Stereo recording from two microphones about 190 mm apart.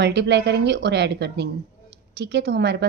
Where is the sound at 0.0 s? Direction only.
60° right (ahead or behind).